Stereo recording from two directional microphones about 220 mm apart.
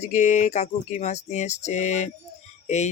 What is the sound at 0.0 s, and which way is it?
Speech, 35° left (ahead or behind).